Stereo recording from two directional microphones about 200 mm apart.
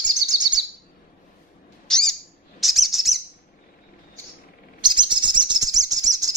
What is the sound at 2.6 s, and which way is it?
Bird, centre (ahead or behind).